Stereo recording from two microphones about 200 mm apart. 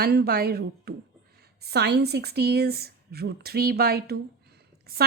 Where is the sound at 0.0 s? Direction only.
55° right (ahead or behind).